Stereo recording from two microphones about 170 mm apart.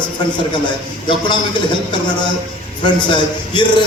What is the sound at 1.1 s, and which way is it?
Speech, 30° left (ahead or behind).